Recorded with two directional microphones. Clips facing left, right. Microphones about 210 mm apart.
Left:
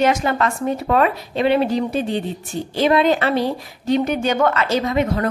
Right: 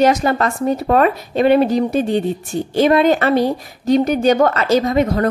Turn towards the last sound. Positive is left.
turn(degrees=-40)  # may be behind; listen again after turning